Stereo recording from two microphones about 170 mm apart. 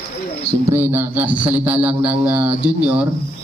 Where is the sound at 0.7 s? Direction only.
10° right (ahead or behind).